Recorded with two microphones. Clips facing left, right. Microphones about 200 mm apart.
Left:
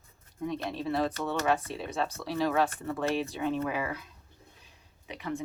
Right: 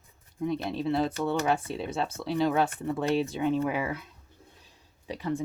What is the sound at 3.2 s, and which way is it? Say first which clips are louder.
Speech: right 4 dB; 25° right (ahead or behind).